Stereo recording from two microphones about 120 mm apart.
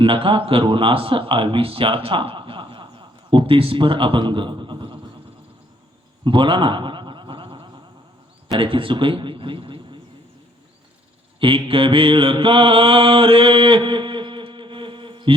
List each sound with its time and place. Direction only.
0.0 s a man's voice: 45° right (ahead or behind)
6.2 s a sound: 45° right (ahead or behind)
8.4 s speech: 45° right (ahead or behind)
11.3 s mantra: 45° right (ahead or behind)